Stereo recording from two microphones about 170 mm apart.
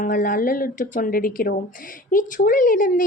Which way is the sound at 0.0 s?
55° left (ahead or behind).